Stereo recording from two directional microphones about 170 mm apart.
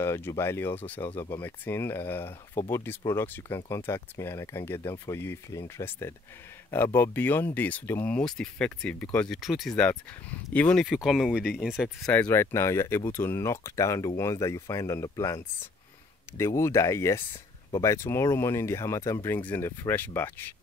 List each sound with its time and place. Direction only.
0.0 s speech: 15° left (ahead or behind)